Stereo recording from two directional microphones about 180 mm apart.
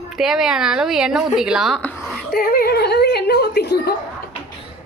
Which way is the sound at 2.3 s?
60° left (ahead or behind).